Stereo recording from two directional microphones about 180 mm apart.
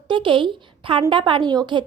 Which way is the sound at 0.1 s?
25° right (ahead or behind).